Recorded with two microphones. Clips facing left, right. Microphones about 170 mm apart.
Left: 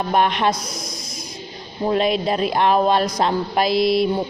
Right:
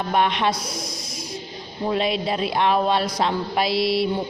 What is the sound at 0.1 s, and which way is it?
Speech, 45° left (ahead or behind).